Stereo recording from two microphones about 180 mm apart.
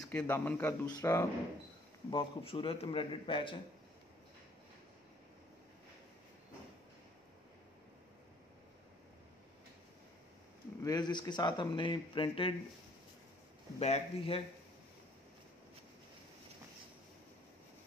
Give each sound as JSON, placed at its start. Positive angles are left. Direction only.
{"t": 0.0, "sound": "a man's voice", "side_deg": 10}
{"t": 2.0, "sound": "a man's voice", "side_deg": 30}
{"t": 10.8, "sound": "a man's voice", "side_deg": 20}
{"t": 13.7, "sound": "speech", "side_deg": 35}